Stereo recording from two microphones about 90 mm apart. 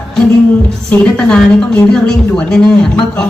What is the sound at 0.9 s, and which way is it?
A woman's voice, 10° left (ahead or behind).